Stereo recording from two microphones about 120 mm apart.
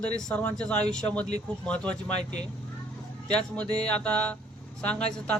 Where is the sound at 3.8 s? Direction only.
10° left (ahead or behind).